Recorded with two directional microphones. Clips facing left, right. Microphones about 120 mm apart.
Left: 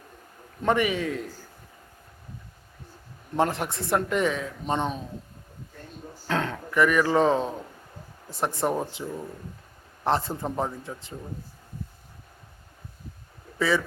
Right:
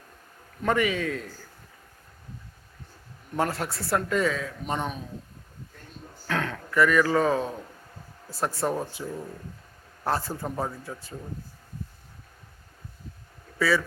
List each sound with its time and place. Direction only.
0.6 s speech: 20° left (ahead or behind)
3.3 s speech: 20° left (ahead or behind)
6.2 s speech: 25° left (ahead or behind)
8.5 s speech: 20° left (ahead or behind)
13.6 s speech: 20° left (ahead or behind)